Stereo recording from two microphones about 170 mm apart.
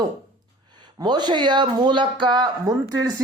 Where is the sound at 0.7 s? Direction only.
25° right (ahead or behind).